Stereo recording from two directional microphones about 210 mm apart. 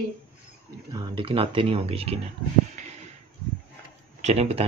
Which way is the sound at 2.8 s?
35° right (ahead or behind).